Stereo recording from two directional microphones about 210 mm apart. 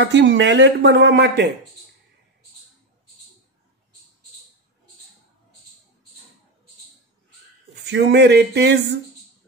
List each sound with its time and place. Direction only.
0.0 s speech: 55° right (ahead or behind)
7.8 s speech: 55° right (ahead or behind)